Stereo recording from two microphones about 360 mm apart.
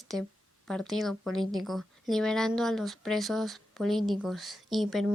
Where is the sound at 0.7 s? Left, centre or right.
Centre.